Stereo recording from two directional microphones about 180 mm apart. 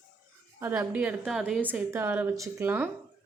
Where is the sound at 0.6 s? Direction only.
10° right (ahead or behind).